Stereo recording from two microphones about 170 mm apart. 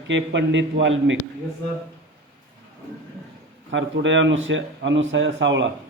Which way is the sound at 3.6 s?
90° right.